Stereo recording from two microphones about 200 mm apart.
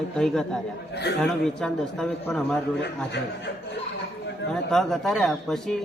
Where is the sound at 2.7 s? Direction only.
60° left (ahead or behind).